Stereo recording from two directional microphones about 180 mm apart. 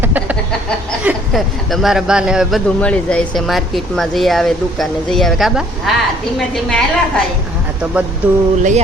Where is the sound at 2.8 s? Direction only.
5° left (ahead or behind).